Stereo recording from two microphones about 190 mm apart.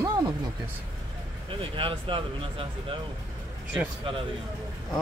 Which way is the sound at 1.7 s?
25° right (ahead or behind).